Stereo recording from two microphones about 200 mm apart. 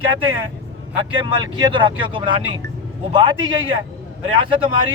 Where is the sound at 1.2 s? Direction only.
20° right (ahead or behind).